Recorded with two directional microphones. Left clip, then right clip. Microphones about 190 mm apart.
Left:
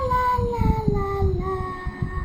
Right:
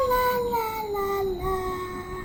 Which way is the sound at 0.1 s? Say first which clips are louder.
Left 1 dB; 40° right (ahead or behind).